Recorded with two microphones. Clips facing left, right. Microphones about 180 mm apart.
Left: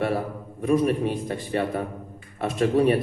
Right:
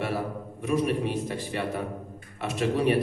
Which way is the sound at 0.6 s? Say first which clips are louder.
Left 5 dB; 45° left (ahead or behind).